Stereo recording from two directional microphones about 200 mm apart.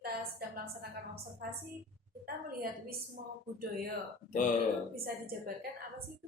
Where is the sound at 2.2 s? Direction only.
50° right (ahead or behind).